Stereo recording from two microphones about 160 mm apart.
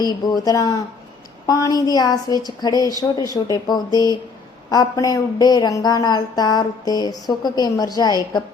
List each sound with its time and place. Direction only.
0.0 s speech: 25° left (ahead or behind)